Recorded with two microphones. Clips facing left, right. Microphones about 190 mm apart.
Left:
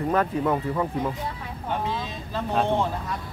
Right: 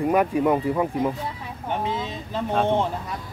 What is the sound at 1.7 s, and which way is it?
Vehicle, 20° right (ahead or behind).